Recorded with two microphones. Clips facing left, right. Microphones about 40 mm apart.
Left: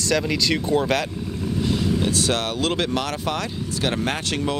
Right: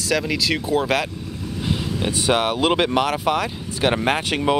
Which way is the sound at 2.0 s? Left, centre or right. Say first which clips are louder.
Right 2 dB; centre.